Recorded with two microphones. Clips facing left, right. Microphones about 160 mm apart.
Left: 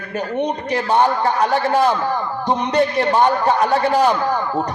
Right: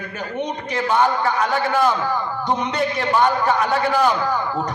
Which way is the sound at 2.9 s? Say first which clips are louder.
Left 3 dB; 35° left (ahead or behind).